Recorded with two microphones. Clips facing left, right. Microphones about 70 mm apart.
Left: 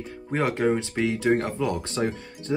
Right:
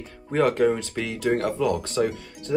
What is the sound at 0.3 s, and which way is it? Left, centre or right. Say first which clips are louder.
Speech: right 3 dB; centre.